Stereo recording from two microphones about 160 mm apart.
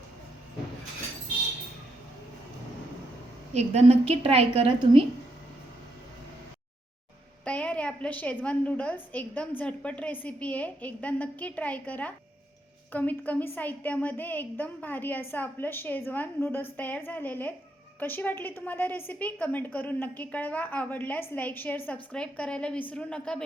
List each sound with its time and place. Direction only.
3.5 s a woman's voice: 45° right (ahead or behind)
7.4 s a woman's voice: 10° left (ahead or behind)